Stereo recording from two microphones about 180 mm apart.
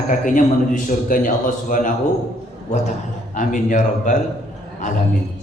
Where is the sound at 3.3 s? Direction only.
45° left (ahead or behind).